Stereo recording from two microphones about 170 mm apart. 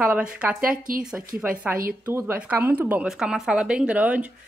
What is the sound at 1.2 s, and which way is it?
Speech, 55° right (ahead or behind).